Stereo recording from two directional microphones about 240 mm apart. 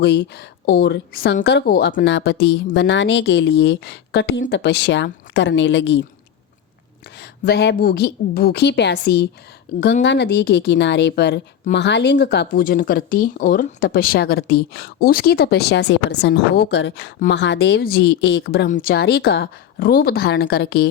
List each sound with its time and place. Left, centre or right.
0.0 s a woman's voice: left
7.2 s a woman's voice: left